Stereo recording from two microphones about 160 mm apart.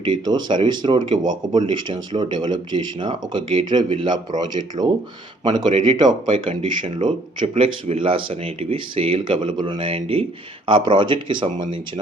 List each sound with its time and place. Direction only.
0.0 s speech: 30° right (ahead or behind)